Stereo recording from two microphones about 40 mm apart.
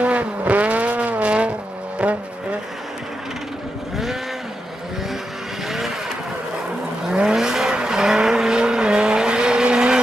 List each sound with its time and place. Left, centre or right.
0.0 s vehicle: right
3.9 s cattle: centre
7.1 s vehicle: centre